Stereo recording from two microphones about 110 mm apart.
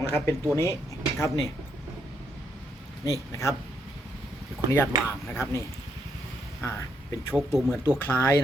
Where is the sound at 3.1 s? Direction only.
30° left (ahead or behind).